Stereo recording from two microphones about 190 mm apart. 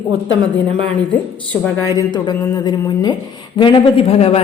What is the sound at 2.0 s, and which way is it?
A woman's voice, 20° left (ahead or behind).